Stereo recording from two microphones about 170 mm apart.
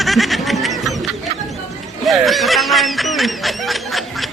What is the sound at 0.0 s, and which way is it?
Snicker, centre (ahead or behind).